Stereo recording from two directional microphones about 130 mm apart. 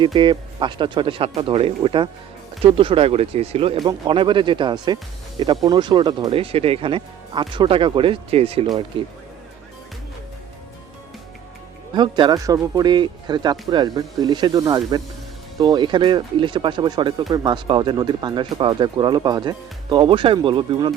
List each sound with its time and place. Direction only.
0.0 s speech: 40° right (ahead or behind)
3.8 s speech: 40° right (ahead or behind)
11.9 s speech: 35° right (ahead or behind)